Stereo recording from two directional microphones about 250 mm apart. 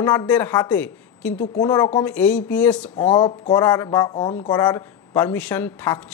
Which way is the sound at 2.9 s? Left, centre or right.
Centre.